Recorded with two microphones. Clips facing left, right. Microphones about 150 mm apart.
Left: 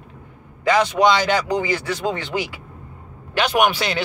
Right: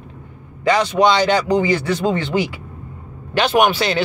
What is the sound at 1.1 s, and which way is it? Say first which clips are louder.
A man's voice: right 4 dB; 30° right (ahead or behind).